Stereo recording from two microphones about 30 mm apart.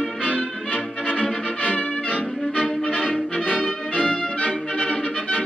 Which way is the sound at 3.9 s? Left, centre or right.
Left.